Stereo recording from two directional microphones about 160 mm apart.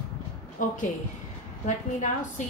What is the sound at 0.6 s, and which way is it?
A woman's voice, 55° left (ahead or behind).